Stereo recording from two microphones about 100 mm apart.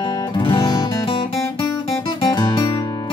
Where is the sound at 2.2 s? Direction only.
45° left (ahead or behind).